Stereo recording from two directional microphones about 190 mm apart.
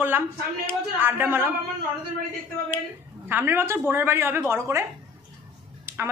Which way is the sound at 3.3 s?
10° right (ahead or behind).